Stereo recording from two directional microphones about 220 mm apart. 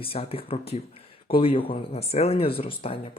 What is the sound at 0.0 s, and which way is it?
A man's voice, 25° left (ahead or behind).